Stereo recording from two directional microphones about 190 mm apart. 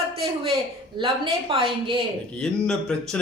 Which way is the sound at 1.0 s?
25° right (ahead or behind).